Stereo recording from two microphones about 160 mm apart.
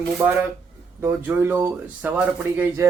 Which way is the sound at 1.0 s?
15° right (ahead or behind).